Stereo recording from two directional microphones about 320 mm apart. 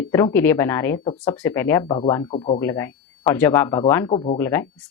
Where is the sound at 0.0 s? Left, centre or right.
Centre.